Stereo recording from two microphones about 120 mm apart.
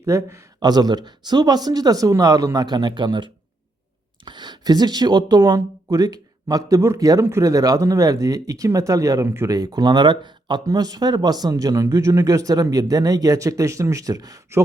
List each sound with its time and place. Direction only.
0.0 s speech: 25° right (ahead or behind); by 3.2 s 40° right (ahead or behind)
4.3 s speech: 40° right (ahead or behind)